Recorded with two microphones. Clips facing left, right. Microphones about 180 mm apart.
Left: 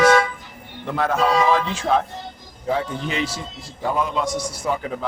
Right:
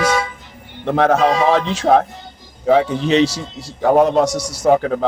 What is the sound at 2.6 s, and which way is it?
A man's voice, 80° right.